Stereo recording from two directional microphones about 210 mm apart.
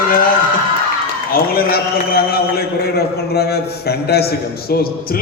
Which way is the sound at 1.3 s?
45° left (ahead or behind).